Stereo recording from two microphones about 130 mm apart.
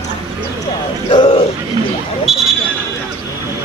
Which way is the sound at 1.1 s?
40° left (ahead or behind).